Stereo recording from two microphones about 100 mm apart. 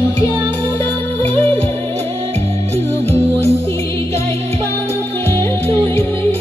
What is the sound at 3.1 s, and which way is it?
Music, 90° right.